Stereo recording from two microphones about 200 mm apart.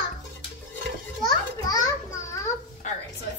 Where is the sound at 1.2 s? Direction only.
20° left (ahead or behind).